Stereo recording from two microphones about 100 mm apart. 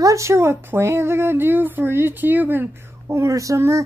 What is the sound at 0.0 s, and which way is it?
A woman's voice, 30° right (ahead or behind).